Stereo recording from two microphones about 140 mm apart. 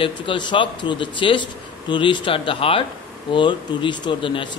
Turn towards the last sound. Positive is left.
turn(degrees=35)  # may be behind; listen again after turning